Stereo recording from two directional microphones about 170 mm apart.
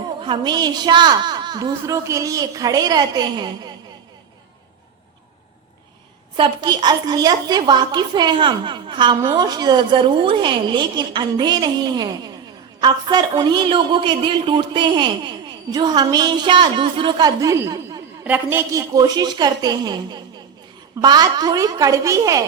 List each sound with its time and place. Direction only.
0.2 s a woman's voice: 25° right (ahead or behind)
6.3 s a woman's voice: 25° right (ahead or behind)